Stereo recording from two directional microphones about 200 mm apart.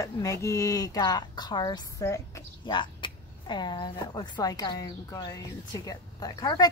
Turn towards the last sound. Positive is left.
turn(degrees=20)  # may be behind; listen again after turning